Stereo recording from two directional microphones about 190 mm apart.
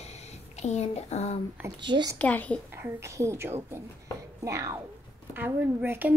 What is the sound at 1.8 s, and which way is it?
Speech, 25° right (ahead or behind).